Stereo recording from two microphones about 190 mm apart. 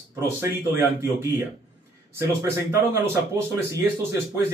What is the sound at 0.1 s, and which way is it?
Speech, 10° right (ahead or behind).